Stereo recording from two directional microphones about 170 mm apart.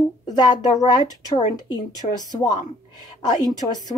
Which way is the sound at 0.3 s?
25° left (ahead or behind).